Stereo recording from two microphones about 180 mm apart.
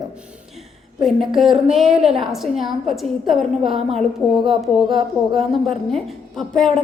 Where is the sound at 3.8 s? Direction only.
30° right (ahead or behind).